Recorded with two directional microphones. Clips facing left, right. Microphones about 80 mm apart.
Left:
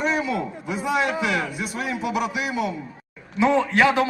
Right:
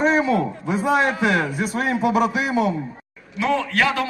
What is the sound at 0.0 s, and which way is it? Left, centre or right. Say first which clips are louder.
A man's voice: right 5 dB; right.